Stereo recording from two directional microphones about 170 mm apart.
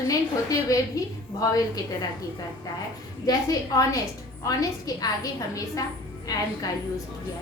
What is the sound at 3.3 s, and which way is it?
Speech, 25° left (ahead or behind).